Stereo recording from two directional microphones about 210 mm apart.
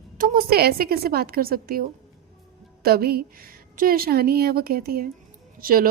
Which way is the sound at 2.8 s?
45° right (ahead or behind).